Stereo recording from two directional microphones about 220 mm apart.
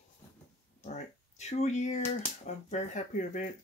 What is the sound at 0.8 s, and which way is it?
Speech, 30° left (ahead or behind).